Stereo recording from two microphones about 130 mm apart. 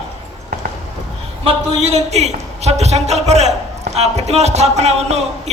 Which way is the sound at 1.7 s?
55° right (ahead or behind).